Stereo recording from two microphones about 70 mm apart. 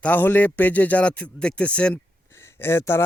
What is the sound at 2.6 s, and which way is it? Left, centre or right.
Speech, left.